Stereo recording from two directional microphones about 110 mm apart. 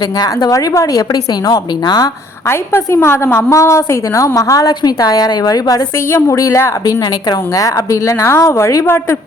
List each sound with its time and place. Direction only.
0.2 s a woman's voice: 35° left (ahead or behind)
2.5 s a woman's voice: 25° left (ahead or behind)